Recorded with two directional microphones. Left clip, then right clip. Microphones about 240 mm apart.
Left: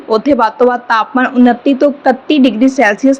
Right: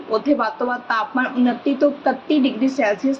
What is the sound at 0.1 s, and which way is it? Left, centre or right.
A woman's voice, left.